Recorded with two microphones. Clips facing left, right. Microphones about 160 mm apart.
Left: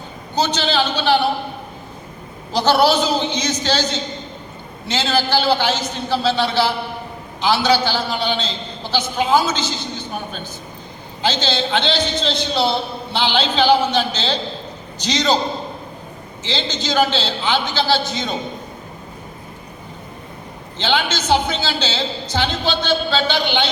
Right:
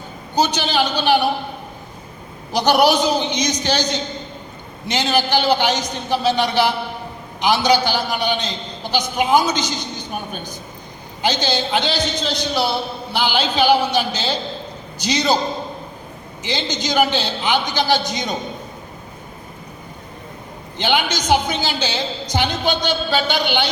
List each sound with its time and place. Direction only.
0.3 s a man's voice: 10° right (ahead or behind)
2.5 s a man's voice: 15° right (ahead or behind)
4.9 s a man's voice: 15° right (ahead or behind)
11.2 s a man's voice: 15° right (ahead or behind)
12.3 s speech: 25° left (ahead or behind)
13.3 s a man's voice: 10° right (ahead or behind)
16.4 s a man's voice: 15° right (ahead or behind)
20.7 s a man's voice: 15° right (ahead or behind)
23.2 s speech: 20° left (ahead or behind)